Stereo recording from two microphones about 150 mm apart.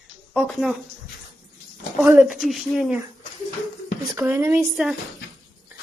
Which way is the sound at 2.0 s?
10° right (ahead or behind).